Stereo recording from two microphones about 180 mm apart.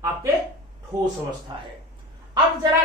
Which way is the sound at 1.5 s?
25° right (ahead or behind).